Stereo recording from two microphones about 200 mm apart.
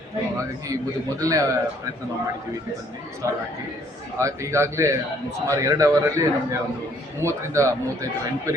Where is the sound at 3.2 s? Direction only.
15° right (ahead or behind).